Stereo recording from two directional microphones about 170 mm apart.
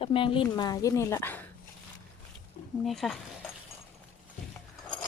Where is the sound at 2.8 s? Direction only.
Centre (ahead or behind).